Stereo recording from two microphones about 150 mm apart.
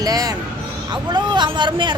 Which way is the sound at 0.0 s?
25° right (ahead or behind).